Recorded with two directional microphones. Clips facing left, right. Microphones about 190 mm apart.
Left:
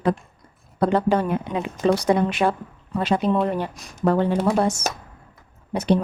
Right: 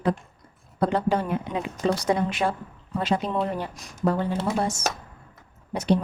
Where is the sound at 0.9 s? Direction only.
60° left (ahead or behind).